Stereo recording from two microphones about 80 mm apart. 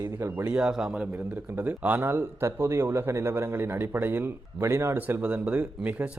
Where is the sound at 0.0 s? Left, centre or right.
Right.